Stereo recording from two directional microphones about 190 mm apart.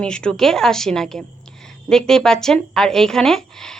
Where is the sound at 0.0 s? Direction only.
5° left (ahead or behind).